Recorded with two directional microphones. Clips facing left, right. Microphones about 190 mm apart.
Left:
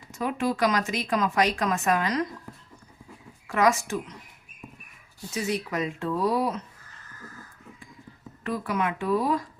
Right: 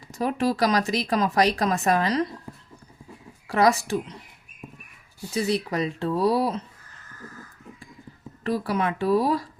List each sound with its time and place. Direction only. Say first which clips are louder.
0.1 s speech: right 3 dB; 35° right (ahead or behind)
3.4 s speech: right 2 dB; 35° right (ahead or behind)
5.3 s speech: right 4 dB; 35° right (ahead or behind)
8.4 s speech: right 3 dB; 35° right (ahead or behind)